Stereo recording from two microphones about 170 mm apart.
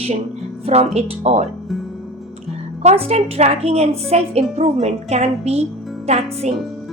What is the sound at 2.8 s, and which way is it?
A woman's voice, 40° right (ahead or behind).